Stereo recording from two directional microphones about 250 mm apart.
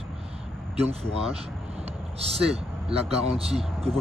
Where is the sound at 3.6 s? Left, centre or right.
Centre.